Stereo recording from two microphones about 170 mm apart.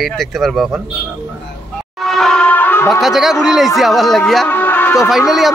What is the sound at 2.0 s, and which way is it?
Music, centre (ahead or behind).